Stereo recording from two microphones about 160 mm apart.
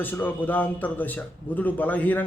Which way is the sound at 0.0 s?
10° left (ahead or behind).